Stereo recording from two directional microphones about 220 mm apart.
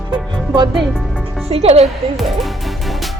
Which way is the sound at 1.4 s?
25° right (ahead or behind).